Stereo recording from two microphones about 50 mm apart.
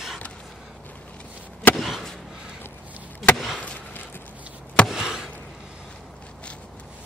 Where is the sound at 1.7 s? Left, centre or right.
Centre.